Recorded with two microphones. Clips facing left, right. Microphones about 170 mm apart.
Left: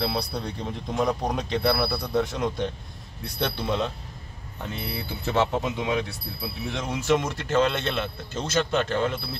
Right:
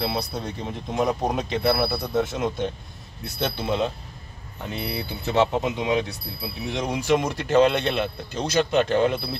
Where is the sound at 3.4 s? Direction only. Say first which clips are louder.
Right 2 dB; 5° right (ahead or behind).